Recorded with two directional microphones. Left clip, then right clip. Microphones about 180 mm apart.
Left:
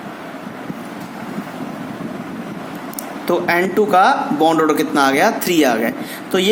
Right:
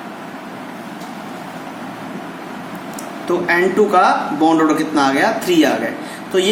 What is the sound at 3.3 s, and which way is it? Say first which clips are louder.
A man's voice: right 1 dB; 55° left (ahead or behind).